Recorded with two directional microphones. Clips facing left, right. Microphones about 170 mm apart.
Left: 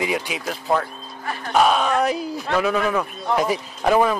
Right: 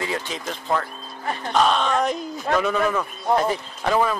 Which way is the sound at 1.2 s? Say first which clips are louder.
Right 2 dB; 25° right (ahead or behind).